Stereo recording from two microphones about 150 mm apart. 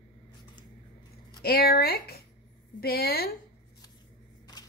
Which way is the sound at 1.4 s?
90° left.